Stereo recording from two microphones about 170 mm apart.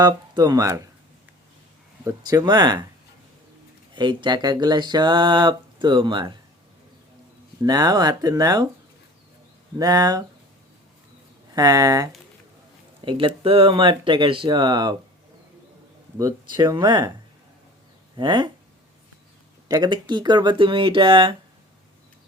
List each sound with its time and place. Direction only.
0.0 s speech: 25° right (ahead or behind)
2.0 s speech: 20° right (ahead or behind)
3.9 s speech: 25° right (ahead or behind)
7.6 s speech: 20° right (ahead or behind)
9.7 s speech: 20° right (ahead or behind)
11.5 s speech: 20° right (ahead or behind)
16.1 s speech: 20° right (ahead or behind)
18.2 s speech: 25° right (ahead or behind)
19.6 s speech: 25° right (ahead or behind)